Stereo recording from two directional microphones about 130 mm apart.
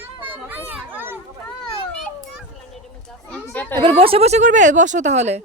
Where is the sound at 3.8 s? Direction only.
45° right (ahead or behind); by 5.4 s 60° right (ahead or behind).